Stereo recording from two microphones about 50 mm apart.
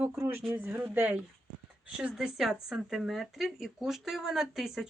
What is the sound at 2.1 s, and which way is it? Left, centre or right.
Speech, centre.